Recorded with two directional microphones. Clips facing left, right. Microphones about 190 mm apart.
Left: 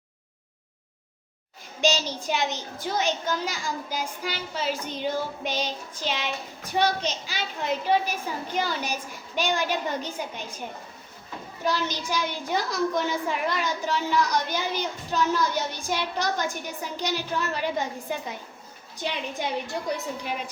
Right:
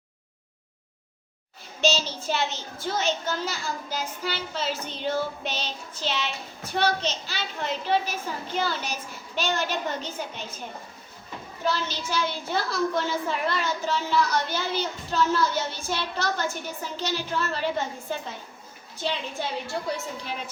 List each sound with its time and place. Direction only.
1.8 s a child's voice: 15° left (ahead or behind)
11.6 s a child's voice: 15° left (ahead or behind)